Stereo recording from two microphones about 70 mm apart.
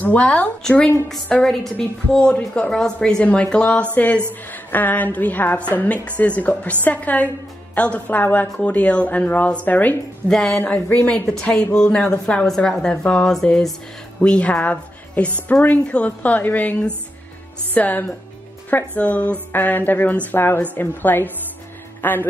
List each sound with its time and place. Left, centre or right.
0.0 s a woman's voice: centre
10.2 s speech: centre
10.6 s a woman's voice: left
11.7 s a woman's voice: centre
17.7 s a woman's voice: left